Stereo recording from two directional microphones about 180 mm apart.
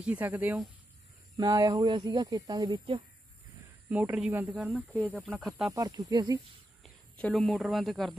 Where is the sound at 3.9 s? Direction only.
10° right (ahead or behind).